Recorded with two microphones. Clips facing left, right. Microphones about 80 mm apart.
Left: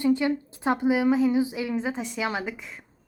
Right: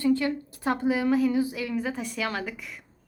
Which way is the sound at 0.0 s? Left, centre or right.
Centre.